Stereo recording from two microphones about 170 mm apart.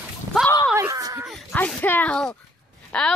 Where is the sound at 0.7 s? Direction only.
15° right (ahead or behind).